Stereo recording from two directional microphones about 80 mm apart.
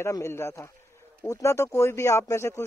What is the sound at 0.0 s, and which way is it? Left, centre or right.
Speech, left.